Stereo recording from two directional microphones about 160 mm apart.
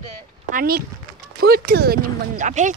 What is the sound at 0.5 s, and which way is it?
Speech, 65° right (ahead or behind).